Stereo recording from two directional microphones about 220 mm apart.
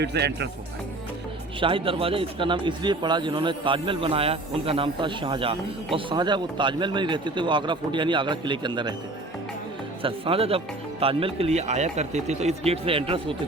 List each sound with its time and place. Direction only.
0.0 s speech: 50° right (ahead or behind)
1.5 s speech: 25° right (ahead or behind)
10.0 s speech: 25° right (ahead or behind)